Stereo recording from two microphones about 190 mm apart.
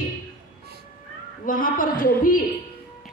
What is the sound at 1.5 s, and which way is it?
Speech, 45° left (ahead or behind).